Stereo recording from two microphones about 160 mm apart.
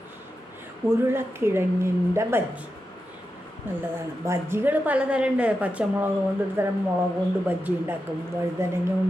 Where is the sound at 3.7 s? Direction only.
15° right (ahead or behind).